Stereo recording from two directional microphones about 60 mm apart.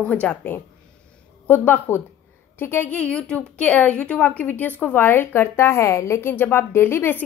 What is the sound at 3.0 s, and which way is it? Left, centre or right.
A woman's voice, centre.